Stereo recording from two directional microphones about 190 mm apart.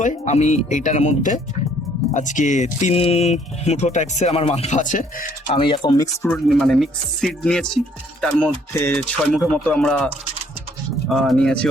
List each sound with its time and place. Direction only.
0.0 s speech: 40° left (ahead or behind)
5.5 s speech: 25° left (ahead or behind)
6.2 s speech: 5° left (ahead or behind)
11.1 s speech: centre (ahead or behind)